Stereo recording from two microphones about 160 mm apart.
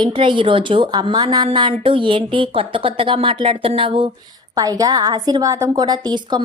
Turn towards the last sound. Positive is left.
turn(degrees=-25)  # may be behind; listen again after turning